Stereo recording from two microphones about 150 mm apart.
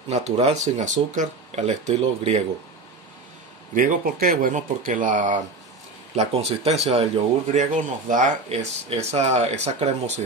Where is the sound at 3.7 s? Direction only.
70° right (ahead or behind).